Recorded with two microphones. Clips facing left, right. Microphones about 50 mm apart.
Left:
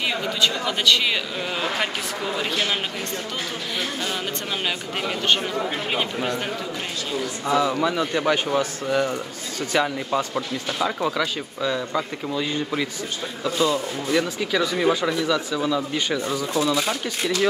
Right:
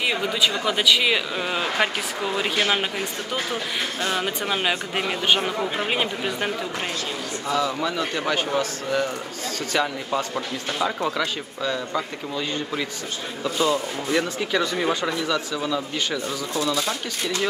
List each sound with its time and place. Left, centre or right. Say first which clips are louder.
0.0 s speech: right 1 dB; centre
4.2 s speech: right 3 dB; centre
7.4 s speech: left 3 dB; centre
9.8 s speech: left 2 dB; centre
13.4 s speech: even; centre
14.2 s speech: left 1 dB; centre